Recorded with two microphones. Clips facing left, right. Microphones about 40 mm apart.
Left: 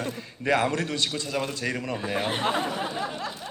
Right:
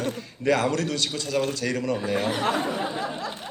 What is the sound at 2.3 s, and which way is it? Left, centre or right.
Speech, left.